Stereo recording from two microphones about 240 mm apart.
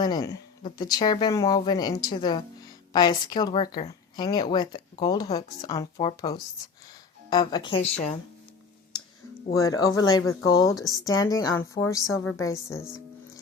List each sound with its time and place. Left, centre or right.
0.0 s speech: centre
9.6 s speech: centre